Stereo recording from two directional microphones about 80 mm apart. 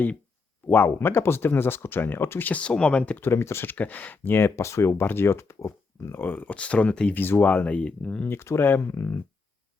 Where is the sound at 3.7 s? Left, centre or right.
Left.